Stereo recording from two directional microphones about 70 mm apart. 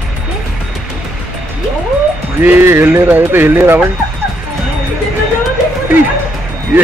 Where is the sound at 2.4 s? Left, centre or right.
Right.